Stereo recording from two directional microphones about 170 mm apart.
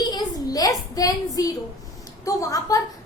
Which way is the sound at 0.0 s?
25° left (ahead or behind).